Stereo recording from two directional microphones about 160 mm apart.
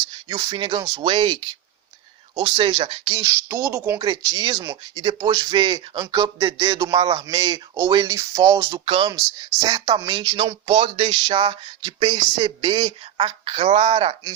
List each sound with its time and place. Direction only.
0.1 s speech: 25° right (ahead or behind)
3.2 s speech: 20° right (ahead or behind)
8.7 s speech: 35° right (ahead or behind)
9.6 s speech: 25° right (ahead or behind)